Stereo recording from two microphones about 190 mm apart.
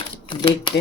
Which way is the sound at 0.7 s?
25° left (ahead or behind).